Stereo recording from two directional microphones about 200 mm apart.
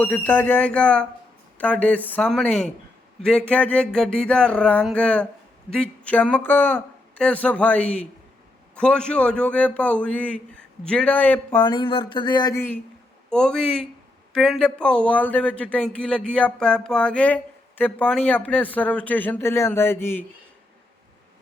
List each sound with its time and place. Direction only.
0.0 s a man's voice: 10° left (ahead or behind)
11.6 s a man's voice: 20° left (ahead or behind)